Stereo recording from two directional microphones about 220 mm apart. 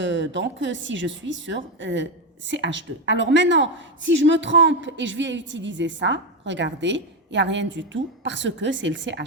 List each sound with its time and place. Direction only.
0.0 s a woman's voice: 55° right (ahead or behind)